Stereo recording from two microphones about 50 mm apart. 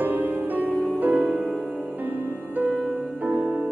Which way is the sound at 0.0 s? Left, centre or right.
Right.